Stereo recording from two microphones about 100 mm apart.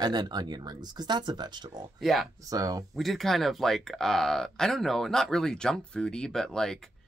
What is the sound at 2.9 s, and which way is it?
Speech, centre (ahead or behind).